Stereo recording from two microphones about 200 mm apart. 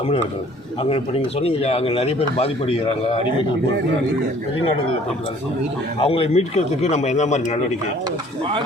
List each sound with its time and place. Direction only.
0.8 s a man's voice: 30° left (ahead or behind)
6.0 s speech: 30° left (ahead or behind)